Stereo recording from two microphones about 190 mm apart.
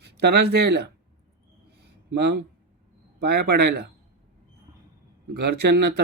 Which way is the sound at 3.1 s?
60° right (ahead or behind).